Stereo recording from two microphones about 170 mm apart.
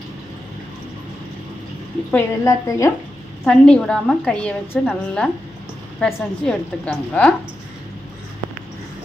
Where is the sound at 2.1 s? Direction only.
20° left (ahead or behind).